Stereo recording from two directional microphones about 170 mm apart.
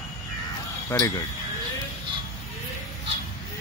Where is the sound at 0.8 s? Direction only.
20° left (ahead or behind).